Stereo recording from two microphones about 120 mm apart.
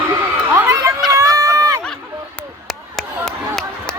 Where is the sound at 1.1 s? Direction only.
25° right (ahead or behind).